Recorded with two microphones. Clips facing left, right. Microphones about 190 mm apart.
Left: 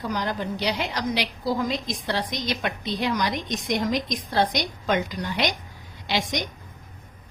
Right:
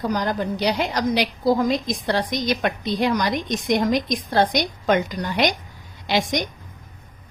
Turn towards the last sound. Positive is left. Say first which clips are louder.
# right 5 dB
turn(degrees=-50)  # may be behind; listen again after turning